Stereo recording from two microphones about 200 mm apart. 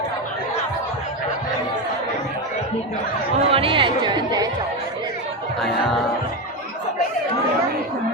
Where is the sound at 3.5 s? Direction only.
25° right (ahead or behind).